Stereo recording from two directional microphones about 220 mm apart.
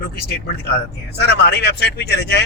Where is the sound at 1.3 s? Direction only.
45° left (ahead or behind).